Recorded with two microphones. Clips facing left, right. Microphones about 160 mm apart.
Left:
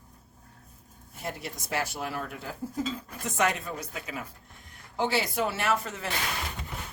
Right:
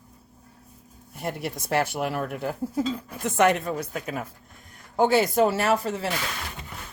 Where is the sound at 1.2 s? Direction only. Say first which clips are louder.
Right 6 dB; 60° right (ahead or behind); by 6.1 s 35° right (ahead or behind).